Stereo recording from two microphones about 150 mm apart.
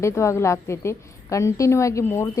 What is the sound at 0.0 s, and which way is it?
A woman's voice, 20° left (ahead or behind).